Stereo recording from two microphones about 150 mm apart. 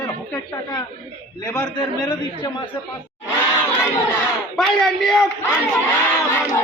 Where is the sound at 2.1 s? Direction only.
30° left (ahead or behind).